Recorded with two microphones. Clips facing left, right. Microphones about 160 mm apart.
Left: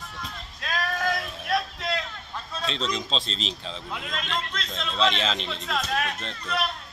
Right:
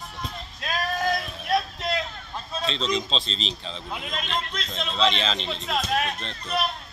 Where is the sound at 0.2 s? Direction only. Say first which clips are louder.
Right 4 dB; 25° right (ahead or behind).